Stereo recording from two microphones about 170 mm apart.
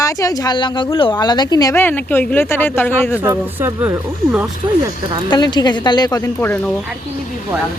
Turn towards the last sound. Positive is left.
turn(degrees=10)  # may be behind; listen again after turning